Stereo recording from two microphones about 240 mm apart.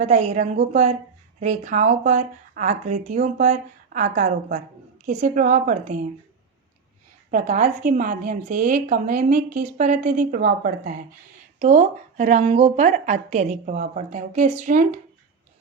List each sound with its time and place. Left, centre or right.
0.0 s speech: right
7.3 s a woman's voice: right